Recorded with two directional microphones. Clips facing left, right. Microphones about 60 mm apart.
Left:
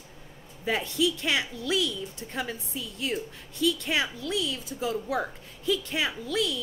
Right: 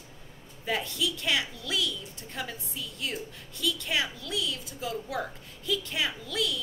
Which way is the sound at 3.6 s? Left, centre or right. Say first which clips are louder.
Left 4 dB; left.